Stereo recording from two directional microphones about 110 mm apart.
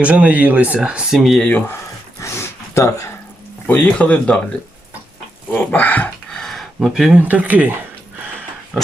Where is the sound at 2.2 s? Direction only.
25° left (ahead or behind).